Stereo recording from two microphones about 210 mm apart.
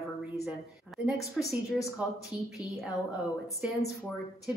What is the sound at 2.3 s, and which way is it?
Speech, 20° left (ahead or behind).